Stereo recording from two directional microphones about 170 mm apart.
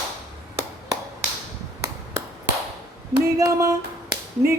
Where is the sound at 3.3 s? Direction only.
20° right (ahead or behind).